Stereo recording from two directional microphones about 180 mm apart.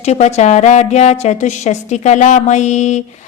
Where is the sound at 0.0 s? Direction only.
35° left (ahead or behind).